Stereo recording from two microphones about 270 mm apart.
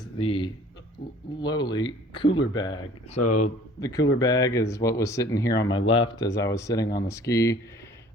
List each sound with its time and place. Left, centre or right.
0.0 s speech: centre
3.2 s speech: left
3.8 s speech: centre